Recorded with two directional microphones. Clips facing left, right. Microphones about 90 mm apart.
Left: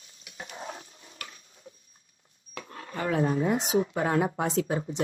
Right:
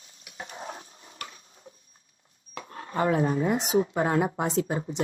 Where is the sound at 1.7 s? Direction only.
35° right (ahead or behind).